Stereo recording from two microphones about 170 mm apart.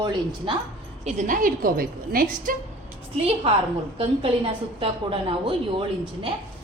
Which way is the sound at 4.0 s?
35° right (ahead or behind).